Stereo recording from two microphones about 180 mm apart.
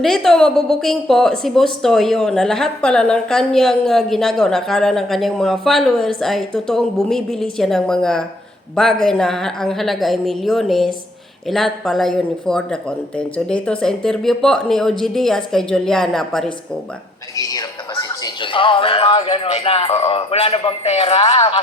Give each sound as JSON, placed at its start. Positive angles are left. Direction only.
{"t": 0.0, "sound": "a woman's voice", "side_deg": 0}
{"t": 17.3, "sound": "a man's voice", "side_deg": 20}